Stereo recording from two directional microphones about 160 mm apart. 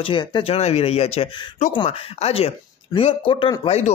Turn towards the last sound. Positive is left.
turn(degrees=40)  # may be behind; listen again after turning